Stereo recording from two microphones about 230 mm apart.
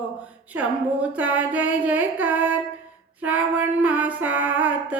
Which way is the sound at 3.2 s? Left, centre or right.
Centre.